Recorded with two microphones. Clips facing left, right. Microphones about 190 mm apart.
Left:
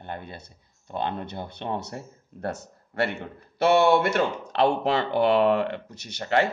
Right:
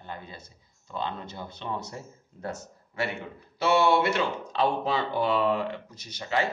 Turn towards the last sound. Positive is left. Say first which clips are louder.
# left 5 dB
turn(degrees=65)  # may be behind; listen again after turning